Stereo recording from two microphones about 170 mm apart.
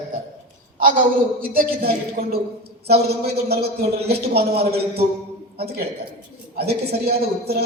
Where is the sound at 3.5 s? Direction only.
70° right (ahead or behind).